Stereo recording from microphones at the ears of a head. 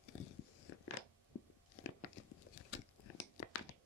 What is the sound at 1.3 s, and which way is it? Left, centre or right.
Biting, left.